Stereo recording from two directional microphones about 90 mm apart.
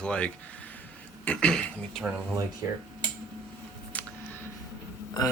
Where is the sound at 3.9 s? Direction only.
20° left (ahead or behind).